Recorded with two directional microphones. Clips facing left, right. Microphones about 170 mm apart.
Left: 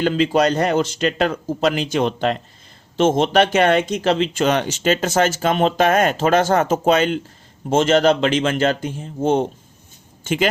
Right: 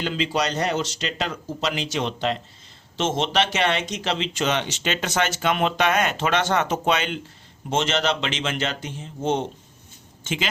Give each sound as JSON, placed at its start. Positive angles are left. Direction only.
{"t": 0.0, "sound": "speech", "side_deg": 45}